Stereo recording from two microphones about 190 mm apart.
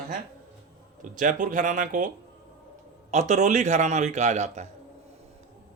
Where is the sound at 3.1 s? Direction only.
35° right (ahead or behind).